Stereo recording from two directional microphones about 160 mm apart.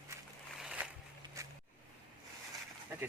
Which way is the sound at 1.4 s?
20° right (ahead or behind).